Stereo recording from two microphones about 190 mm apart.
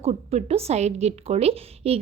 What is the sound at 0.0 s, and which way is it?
A woman's voice, 35° right (ahead or behind).